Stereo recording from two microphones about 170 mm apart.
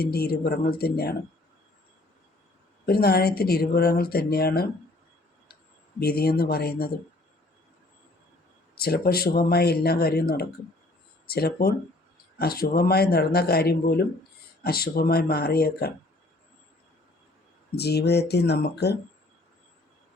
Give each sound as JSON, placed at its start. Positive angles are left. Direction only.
{"t": 0.0, "sound": "speech", "side_deg": 65}
{"t": 2.8, "sound": "speech", "side_deg": 65}
{"t": 6.0, "sound": "speech", "side_deg": 65}
{"t": 8.7, "sound": "speech", "side_deg": 65}
{"t": 17.7, "sound": "speech", "side_deg": 70}